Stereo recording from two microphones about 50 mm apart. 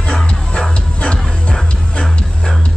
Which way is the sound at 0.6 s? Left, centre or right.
Left.